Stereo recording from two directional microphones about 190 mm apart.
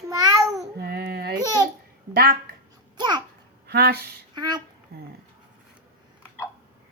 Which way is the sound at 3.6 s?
55° right (ahead or behind).